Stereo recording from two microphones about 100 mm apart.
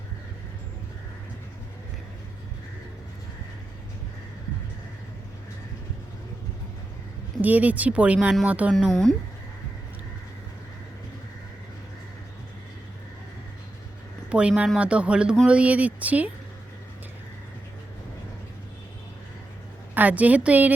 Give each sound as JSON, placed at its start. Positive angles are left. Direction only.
{"t": 7.4, "sound": "speech", "side_deg": -15}
{"t": 8.9, "sound": "speech", "side_deg": 5}
{"t": 14.3, "sound": "speech", "side_deg": -10}
{"t": 19.9, "sound": "speech", "side_deg": -15}